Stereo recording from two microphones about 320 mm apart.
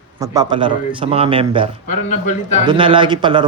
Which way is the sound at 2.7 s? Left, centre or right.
Centre.